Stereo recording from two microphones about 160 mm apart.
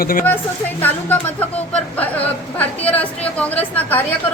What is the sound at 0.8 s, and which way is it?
A woman's voice, 10° left (ahead or behind).